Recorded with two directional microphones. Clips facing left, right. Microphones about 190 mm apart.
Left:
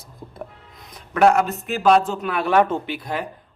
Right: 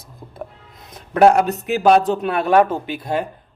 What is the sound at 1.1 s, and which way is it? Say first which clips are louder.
Speech: right 3 dB; 35° right (ahead or behind).